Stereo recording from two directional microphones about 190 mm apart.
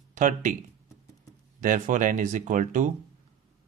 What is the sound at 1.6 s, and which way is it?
Speech, 45° right (ahead or behind).